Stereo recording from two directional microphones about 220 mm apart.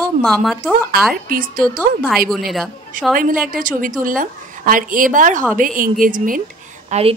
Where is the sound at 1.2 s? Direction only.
40° right (ahead or behind).